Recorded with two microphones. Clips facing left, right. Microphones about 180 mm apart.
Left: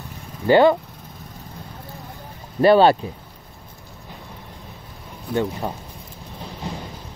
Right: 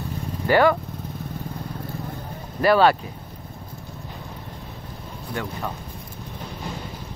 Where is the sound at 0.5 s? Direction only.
25° left (ahead or behind).